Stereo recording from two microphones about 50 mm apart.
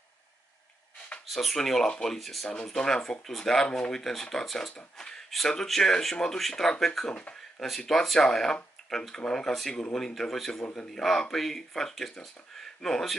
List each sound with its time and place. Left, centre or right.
1.3 s speech: centre
2.6 s speech: centre
10.6 s speech: left
10.9 s speech: centre